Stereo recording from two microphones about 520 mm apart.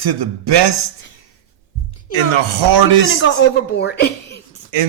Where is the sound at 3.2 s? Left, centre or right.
Centre.